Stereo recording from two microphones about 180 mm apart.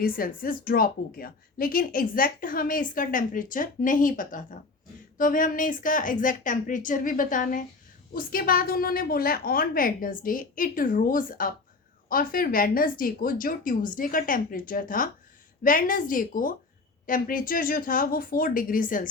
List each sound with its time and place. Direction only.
0.0 s a woman's voice: 55° left (ahead or behind)